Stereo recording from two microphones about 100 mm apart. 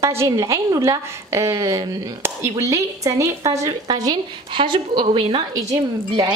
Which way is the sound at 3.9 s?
45° right (ahead or behind).